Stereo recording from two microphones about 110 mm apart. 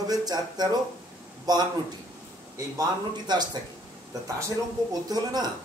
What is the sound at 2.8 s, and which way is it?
Speech, 40° right (ahead or behind).